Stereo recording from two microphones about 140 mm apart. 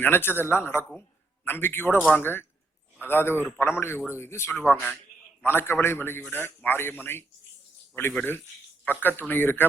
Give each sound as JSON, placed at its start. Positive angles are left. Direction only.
{"t": 0.0, "sound": "a man's voice", "side_deg": 15}